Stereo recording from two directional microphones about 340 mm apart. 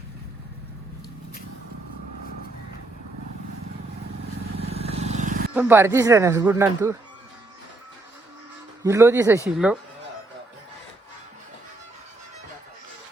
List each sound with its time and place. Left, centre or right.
4.5 s vehicle: centre
5.5 s speech: centre
8.8 s speech: centre